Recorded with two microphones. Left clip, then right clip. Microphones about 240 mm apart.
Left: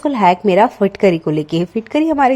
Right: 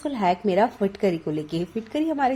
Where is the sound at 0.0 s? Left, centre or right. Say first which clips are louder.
Left 10 dB; left.